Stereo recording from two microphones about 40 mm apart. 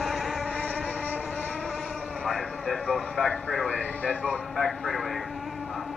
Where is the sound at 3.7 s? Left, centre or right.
Left.